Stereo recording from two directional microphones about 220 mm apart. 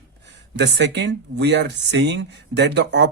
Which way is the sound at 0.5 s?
50° right (ahead or behind).